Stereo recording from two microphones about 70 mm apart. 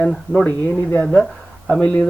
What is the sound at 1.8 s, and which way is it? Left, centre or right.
Speech, centre.